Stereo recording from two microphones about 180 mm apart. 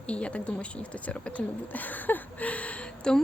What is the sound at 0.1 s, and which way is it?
A woman's voice, 5° left (ahead or behind).